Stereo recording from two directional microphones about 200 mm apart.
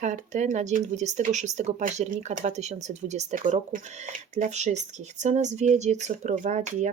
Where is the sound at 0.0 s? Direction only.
40° right (ahead or behind).